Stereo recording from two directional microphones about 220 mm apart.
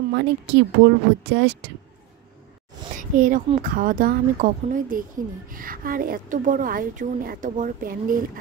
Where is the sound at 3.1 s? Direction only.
35° right (ahead or behind).